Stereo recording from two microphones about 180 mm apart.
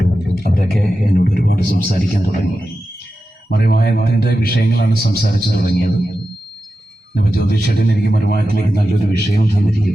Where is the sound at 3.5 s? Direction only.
60° left (ahead or behind).